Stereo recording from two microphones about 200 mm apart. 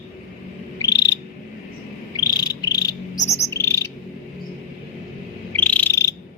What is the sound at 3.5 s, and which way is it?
Bird, 15° left (ahead or behind).